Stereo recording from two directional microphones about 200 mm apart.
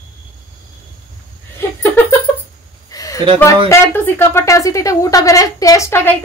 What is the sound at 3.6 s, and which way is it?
A woman's voice, 15° left (ahead or behind).